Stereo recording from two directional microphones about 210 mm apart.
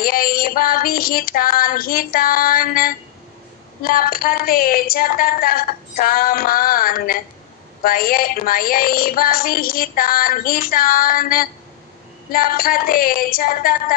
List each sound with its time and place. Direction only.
0.0 s a woman's voice: 45° left (ahead or behind)